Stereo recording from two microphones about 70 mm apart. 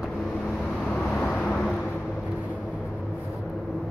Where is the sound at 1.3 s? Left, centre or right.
Centre.